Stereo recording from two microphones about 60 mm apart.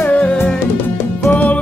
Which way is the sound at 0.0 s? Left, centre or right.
Left.